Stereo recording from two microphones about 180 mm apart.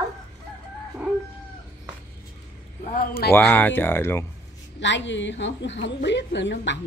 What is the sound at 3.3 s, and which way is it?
Speech, 10° left (ahead or behind).